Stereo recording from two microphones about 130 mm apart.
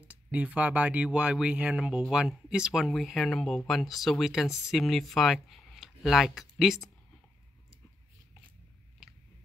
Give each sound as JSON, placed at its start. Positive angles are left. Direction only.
{"t": 0.0, "sound": "speech", "side_deg": -10}